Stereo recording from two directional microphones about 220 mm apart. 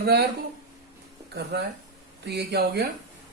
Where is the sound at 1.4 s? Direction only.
50° right (ahead or behind).